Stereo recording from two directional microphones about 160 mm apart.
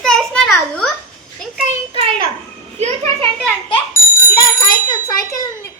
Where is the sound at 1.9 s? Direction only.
35° right (ahead or behind).